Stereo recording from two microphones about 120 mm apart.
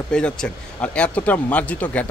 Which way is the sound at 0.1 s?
5° left (ahead or behind).